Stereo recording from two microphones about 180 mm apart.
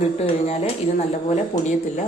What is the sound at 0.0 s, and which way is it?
Speech, 35° left (ahead or behind).